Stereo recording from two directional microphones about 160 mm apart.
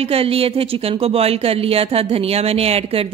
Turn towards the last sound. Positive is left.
turn(degrees=-40)  # may be behind; listen again after turning